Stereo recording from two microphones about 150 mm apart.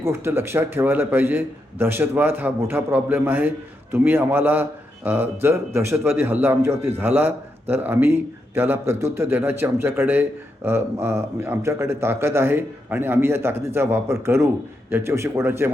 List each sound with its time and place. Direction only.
0.0 s a man's voice: 15° right (ahead or behind)